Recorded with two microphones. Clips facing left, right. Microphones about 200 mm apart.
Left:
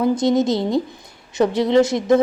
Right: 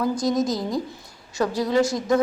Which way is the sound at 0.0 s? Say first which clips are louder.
Left 5 dB; 25° left (ahead or behind).